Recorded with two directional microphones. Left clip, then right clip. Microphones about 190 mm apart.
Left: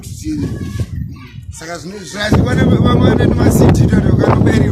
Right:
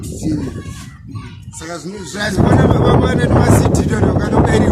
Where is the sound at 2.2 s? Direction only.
5° right (ahead or behind).